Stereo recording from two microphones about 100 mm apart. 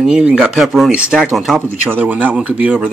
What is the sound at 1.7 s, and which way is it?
Speech, 20° right (ahead or behind).